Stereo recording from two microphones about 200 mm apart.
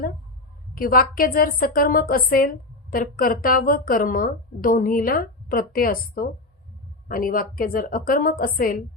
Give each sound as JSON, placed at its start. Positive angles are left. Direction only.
{"t": 0.8, "sound": "a woman's voice", "side_deg": 45}